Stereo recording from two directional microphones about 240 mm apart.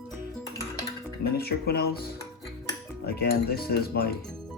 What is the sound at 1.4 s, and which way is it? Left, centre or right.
Speech, left.